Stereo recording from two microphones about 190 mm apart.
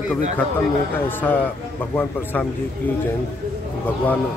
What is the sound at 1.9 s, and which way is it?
Speech, 10° left (ahead or behind).